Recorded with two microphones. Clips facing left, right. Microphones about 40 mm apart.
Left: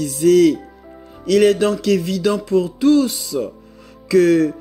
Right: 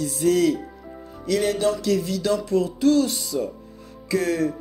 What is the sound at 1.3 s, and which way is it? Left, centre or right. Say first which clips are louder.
Music: left 9 dB; left.